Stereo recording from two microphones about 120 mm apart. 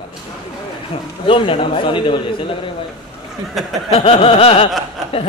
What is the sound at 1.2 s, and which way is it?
Speech, 45° left (ahead or behind).